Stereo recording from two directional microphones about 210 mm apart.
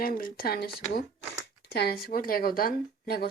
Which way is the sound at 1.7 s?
45° left (ahead or behind).